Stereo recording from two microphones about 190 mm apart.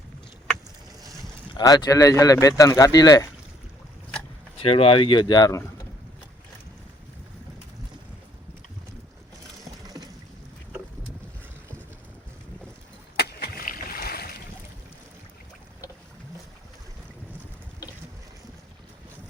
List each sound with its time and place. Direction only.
1.5 s speech: 20° left (ahead or behind)
4.5 s speech: 30° left (ahead or behind)
13.1 s boat: 55° left (ahead or behind)